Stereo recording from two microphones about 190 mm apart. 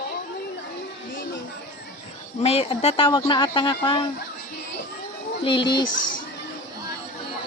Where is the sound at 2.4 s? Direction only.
30° left (ahead or behind).